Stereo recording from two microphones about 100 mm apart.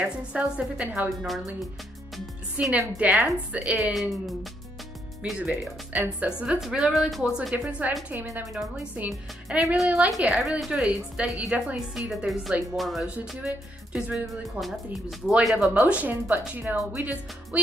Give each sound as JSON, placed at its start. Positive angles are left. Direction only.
{"t": 0.0, "sound": "speech", "side_deg": -10}
{"t": 2.5, "sound": "speech", "side_deg": -15}
{"t": 3.9, "sound": "speech", "side_deg": 0}
{"t": 5.4, "sound": "speech", "side_deg": -15}
{"t": 7.5, "sound": "speech", "side_deg": -15}